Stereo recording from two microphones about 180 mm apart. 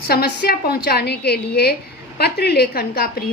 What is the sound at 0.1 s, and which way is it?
A woman's voice, 60° left (ahead or behind).